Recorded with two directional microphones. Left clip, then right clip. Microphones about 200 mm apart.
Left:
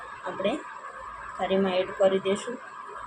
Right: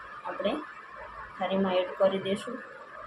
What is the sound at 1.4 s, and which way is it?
Speech, 10° left (ahead or behind).